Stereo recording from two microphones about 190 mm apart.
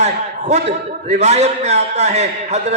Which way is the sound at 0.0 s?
35° right (ahead or behind).